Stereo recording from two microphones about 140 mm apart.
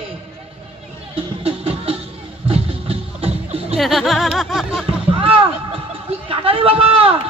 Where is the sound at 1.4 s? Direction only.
45° right (ahead or behind).